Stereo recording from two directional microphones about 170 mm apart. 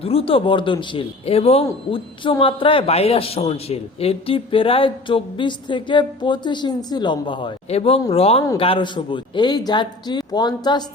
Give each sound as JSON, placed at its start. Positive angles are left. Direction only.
{"t": 0.0, "sound": "a man's voice", "side_deg": 35}